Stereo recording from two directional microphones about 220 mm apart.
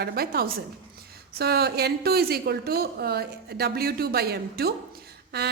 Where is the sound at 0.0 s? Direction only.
45° right (ahead or behind).